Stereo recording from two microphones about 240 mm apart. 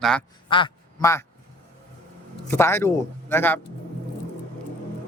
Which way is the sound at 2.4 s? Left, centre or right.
Centre.